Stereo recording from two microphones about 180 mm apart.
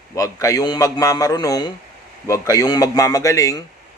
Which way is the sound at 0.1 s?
20° left (ahead or behind).